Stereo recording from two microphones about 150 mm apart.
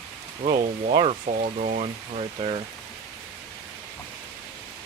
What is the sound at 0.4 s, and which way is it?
Speech, 55° right (ahead or behind).